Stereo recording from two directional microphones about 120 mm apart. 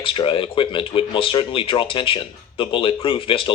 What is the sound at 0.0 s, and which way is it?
Speech, 45° left (ahead or behind).